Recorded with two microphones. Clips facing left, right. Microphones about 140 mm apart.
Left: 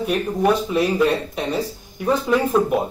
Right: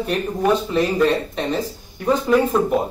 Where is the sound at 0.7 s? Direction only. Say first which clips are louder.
Right 1 dB; 10° left (ahead or behind).